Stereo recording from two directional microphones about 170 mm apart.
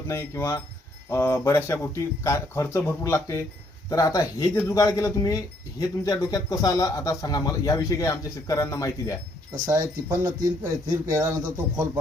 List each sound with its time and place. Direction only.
0.1 s speech: 15° left (ahead or behind)
9.6 s speech: 15° right (ahead or behind)